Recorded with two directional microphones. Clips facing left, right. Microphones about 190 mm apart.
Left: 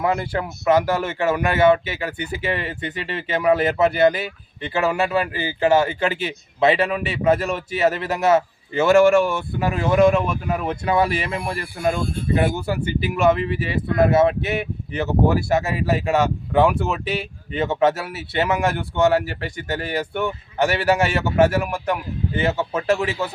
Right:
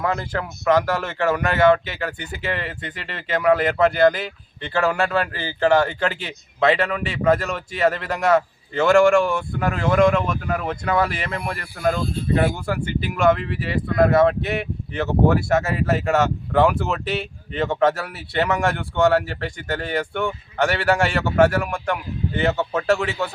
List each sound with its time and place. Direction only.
0.0 s speech: 15° left (ahead or behind)
1.4 s speech: 10° left (ahead or behind)
13.0 s speech: 5° left (ahead or behind)